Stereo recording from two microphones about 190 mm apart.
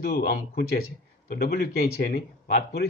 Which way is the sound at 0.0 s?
50° left (ahead or behind).